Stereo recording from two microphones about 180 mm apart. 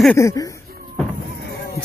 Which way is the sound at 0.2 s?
20° left (ahead or behind).